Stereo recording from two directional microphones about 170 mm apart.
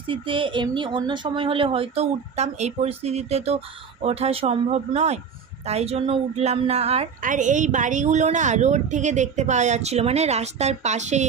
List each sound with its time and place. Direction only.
0.1 s speech: 30° right (ahead or behind)
7.2 s a woman's voice: 50° right (ahead or behind)